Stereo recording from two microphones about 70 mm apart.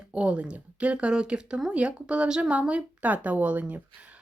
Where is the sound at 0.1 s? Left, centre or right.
Centre.